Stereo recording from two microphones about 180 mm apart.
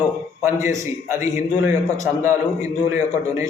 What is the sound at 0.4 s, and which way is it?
A man's voice, 15° right (ahead or behind).